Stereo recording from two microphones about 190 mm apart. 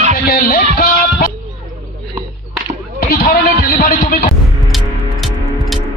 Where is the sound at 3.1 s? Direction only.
50° left (ahead or behind).